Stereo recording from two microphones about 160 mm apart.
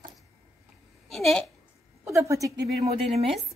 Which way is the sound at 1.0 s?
Centre (ahead or behind).